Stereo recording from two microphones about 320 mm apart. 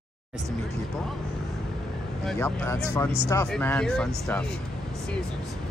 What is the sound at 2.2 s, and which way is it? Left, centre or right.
Speech, centre.